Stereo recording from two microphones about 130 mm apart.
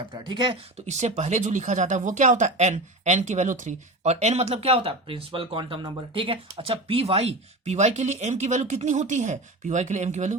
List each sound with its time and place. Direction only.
0.1 s speech: 35° right (ahead or behind)
0.9 s speech: 60° right (ahead or behind)